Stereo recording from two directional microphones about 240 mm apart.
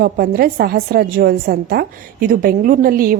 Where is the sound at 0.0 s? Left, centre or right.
Right.